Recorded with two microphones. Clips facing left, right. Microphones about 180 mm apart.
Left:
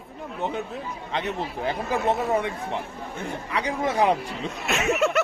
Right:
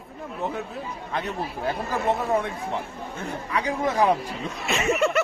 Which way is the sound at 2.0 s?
20° left (ahead or behind).